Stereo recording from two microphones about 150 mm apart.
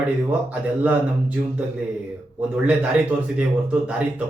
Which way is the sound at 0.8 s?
10° right (ahead or behind).